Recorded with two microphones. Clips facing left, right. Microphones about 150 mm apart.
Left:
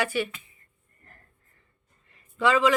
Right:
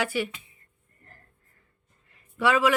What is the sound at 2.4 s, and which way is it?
Speech, 10° right (ahead or behind).